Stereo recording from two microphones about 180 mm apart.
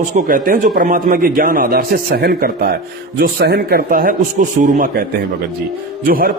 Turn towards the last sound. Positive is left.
turn(degrees=-50)  # may be behind; listen again after turning